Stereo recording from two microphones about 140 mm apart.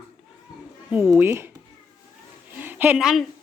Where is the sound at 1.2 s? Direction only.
15° right (ahead or behind).